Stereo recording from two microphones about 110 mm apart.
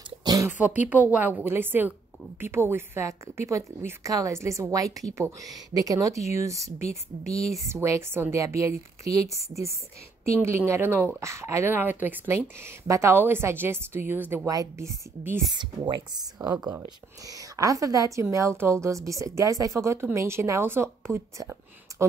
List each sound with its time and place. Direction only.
0.2 s a sound: 35° right (ahead or behind)
0.5 s a woman's voice: 15° right (ahead or behind)
10.4 s a woman's voice: 25° right (ahead or behind)
14.5 s a woman's voice: 30° right (ahead or behind)
15.5 s speech: 45° right (ahead or behind)
17.3 s a woman's voice: 30° right (ahead or behind)